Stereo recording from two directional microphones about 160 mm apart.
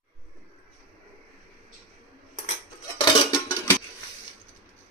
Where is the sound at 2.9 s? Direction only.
25° left (ahead or behind).